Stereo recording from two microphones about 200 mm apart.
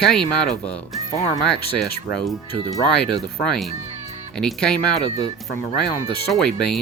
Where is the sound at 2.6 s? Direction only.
15° right (ahead or behind).